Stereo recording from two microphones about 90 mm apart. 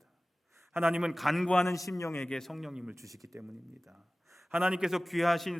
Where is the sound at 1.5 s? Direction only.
35° left (ahead or behind).